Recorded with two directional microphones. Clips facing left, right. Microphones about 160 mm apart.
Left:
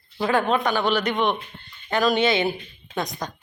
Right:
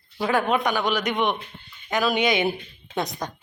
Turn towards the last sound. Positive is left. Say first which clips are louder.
# right 1 dB
turn(degrees=-25)  # may be behind; listen again after turning